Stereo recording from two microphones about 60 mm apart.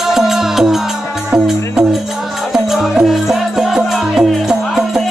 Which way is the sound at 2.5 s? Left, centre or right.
Centre.